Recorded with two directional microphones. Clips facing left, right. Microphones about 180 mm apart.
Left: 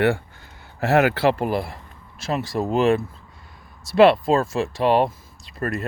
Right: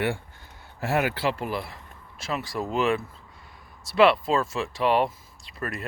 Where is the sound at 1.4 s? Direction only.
45° left (ahead or behind).